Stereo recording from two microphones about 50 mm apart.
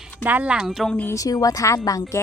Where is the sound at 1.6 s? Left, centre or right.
Left.